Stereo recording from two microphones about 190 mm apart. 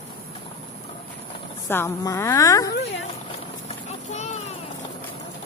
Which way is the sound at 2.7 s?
60° left (ahead or behind).